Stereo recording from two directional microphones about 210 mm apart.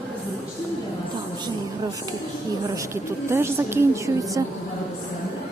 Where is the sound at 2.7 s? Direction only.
15° right (ahead or behind).